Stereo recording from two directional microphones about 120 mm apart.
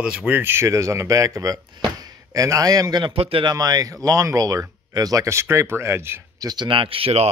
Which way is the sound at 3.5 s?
30° right (ahead or behind).